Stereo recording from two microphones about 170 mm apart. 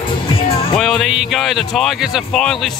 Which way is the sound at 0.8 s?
Centre (ahead or behind).